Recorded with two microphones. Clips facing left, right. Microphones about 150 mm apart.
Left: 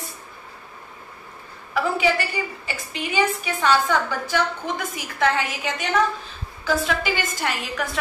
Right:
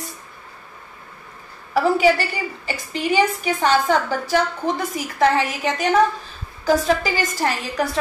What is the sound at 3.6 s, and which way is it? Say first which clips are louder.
A woman's voice: right 2 dB; 40° right (ahead or behind).